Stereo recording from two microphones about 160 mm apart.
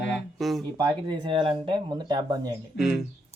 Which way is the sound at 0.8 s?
25° right (ahead or behind).